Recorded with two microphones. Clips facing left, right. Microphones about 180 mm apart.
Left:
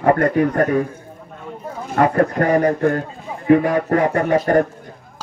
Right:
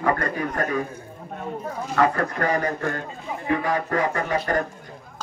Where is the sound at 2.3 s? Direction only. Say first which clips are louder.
Left 8 dB; 45° left (ahead or behind).